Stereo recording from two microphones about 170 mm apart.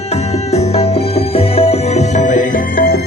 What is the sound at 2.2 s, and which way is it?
Music, 45° left (ahead or behind).